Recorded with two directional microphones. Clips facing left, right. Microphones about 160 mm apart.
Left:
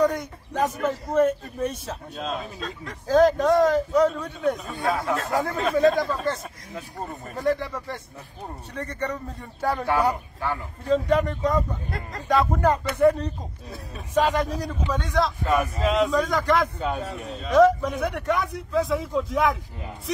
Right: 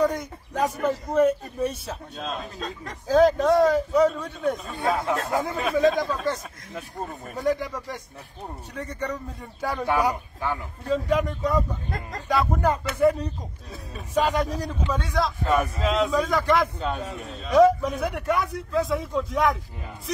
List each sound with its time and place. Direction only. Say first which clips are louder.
0.0 s a man's voice: left 1 dB; 5° right (ahead or behind)
7.1 s a man's voice: left 1 dB; centre (ahead or behind)
7.5 s a man's voice: even; 15° right (ahead or behind)
14.4 s a man's voice: even; 10° left (ahead or behind)
14.9 s a man's voice: left 2 dB; 5° right (ahead or behind)
16.8 s a man's voice: left 1 dB; 5° left (ahead or behind)